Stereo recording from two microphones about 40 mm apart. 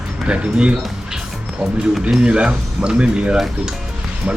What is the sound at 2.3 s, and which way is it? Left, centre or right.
Speech, right.